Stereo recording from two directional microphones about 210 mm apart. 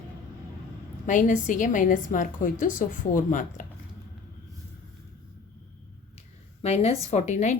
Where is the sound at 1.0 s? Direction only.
35° left (ahead or behind).